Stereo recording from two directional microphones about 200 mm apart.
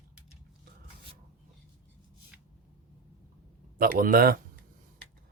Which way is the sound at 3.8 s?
45° right (ahead or behind).